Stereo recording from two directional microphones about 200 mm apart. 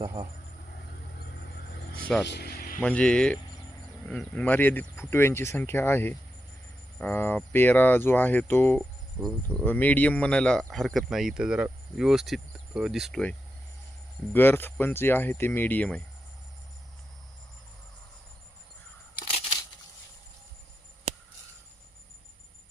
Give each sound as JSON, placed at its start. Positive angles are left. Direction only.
{"t": 0.0, "sound": "speech", "side_deg": -20}
{"t": 2.2, "sound": "speech", "side_deg": 55}
{"t": 2.8, "sound": "speech", "side_deg": 5}
{"t": 14.3, "sound": "speech", "side_deg": 10}